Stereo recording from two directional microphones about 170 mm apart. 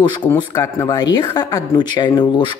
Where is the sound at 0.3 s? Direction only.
15° left (ahead or behind).